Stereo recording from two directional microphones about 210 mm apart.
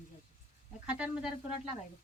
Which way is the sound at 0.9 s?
5° right (ahead or behind).